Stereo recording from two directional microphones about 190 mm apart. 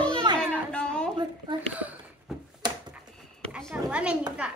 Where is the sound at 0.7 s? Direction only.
5° left (ahead or behind).